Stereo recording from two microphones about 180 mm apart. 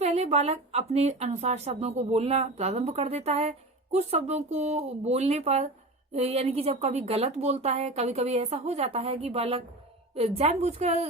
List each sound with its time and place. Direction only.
0.0 s a woman's voice: 35° right (ahead or behind)